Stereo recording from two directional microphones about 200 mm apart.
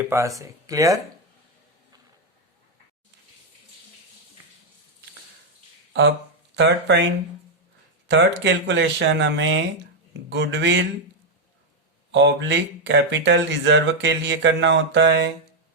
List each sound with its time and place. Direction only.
0.0 s speech: 15° right (ahead or behind)
5.9 s speech: 60° right (ahead or behind)
12.1 s speech: 60° right (ahead or behind)